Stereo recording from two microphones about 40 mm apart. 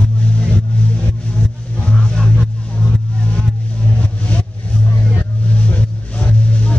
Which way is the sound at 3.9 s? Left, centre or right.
Left.